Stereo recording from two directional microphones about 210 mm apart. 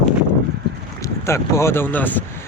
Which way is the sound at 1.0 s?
15° left (ahead or behind).